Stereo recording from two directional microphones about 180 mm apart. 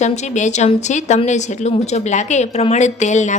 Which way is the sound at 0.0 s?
40° left (ahead or behind).